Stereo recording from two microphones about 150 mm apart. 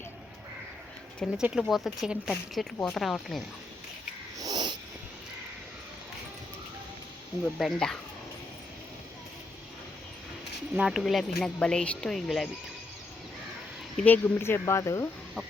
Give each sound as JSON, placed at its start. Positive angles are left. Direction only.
{"t": 1.4, "sound": "speech", "side_deg": -5}
{"t": 4.4, "sound": "a sound", "side_deg": -25}
{"t": 7.4, "sound": "speech", "side_deg": 0}
{"t": 10.8, "sound": "speech", "side_deg": 0}
{"t": 13.9, "sound": "speech", "side_deg": 10}